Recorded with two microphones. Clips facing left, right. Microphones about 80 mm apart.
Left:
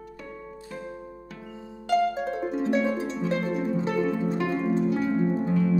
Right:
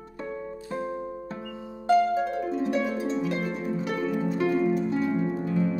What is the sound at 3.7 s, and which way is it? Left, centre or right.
Music, left.